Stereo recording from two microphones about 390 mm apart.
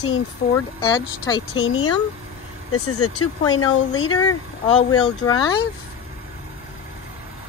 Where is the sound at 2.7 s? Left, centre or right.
Left.